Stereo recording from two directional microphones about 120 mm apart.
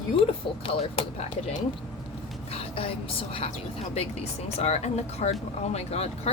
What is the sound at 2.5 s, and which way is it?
Speech, 50° left (ahead or behind).